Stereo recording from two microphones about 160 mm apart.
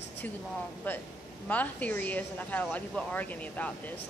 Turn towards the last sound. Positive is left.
turn(degrees=10)  # may be behind; listen again after turning